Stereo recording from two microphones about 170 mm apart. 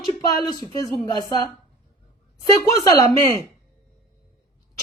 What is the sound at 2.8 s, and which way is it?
Speech, 20° left (ahead or behind).